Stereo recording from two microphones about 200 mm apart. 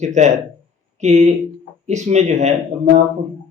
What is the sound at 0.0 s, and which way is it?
A man's voice, 35° right (ahead or behind).